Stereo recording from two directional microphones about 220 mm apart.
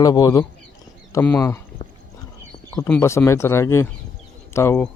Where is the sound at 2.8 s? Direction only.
5° left (ahead or behind).